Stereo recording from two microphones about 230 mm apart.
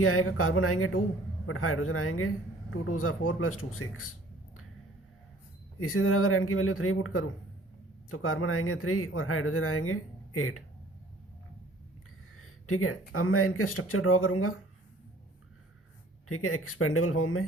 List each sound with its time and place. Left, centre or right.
0.0 s speech: left
5.9 s speech: left
12.4 s speech: left
16.3 s speech: left